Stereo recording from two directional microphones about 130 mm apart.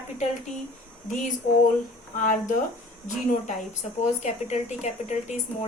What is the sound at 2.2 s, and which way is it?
Speech, 80° left.